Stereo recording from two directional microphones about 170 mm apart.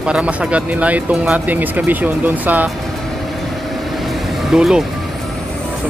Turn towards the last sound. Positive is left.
turn(degrees=-5)  # may be behind; listen again after turning